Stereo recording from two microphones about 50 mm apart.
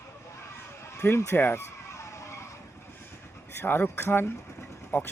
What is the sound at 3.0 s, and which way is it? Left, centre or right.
Vehicle, left.